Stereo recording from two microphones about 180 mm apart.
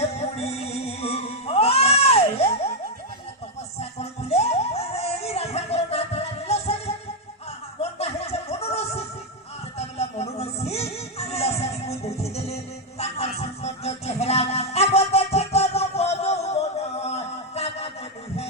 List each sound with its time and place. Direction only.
0.0 s music: 35° left (ahead or behind)
3.8 s music: 35° left (ahead or behind)
7.8 s chuckle: 35° left (ahead or behind)
9.7 s music: 35° left (ahead or behind)